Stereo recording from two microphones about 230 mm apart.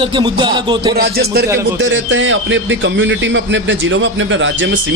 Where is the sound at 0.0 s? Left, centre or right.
Right.